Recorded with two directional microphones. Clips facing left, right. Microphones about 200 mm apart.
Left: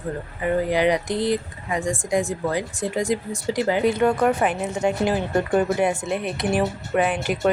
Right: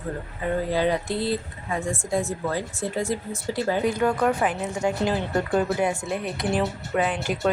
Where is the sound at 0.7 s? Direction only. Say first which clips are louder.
Left 3 dB; 15° left (ahead or behind).